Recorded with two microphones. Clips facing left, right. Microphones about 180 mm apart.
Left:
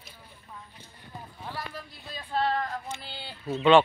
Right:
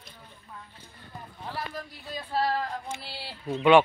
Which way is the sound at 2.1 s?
10° right (ahead or behind).